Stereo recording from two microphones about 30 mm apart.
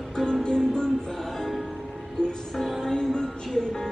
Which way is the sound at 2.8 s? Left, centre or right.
Left.